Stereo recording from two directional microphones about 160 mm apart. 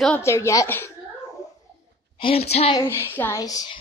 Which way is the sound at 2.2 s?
40° left (ahead or behind).